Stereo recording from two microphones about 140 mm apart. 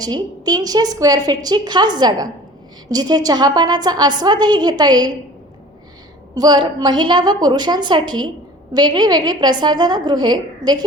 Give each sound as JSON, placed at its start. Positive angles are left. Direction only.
{"t": 0.0, "sound": "a woman's voice", "side_deg": -30}
{"t": 6.3, "sound": "a woman's voice", "side_deg": -30}